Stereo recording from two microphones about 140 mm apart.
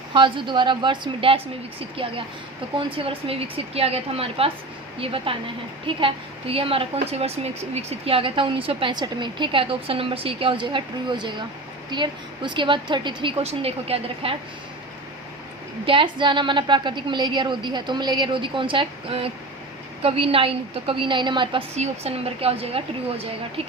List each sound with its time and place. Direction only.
0.1 s a woman's voice: 35° right (ahead or behind)
2.7 s a woman's voice: 40° right (ahead or behind)
15.9 s a woman's voice: 35° right (ahead or behind)
21.8 s a woman's voice: 45° right (ahead or behind)